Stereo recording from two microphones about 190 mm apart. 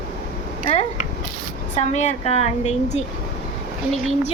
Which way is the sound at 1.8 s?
35° left (ahead or behind).